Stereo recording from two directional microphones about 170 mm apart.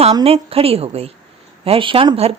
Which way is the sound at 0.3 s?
35° right (ahead or behind).